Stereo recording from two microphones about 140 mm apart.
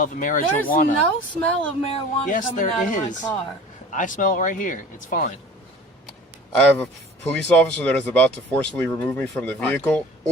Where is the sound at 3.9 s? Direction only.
70° left (ahead or behind).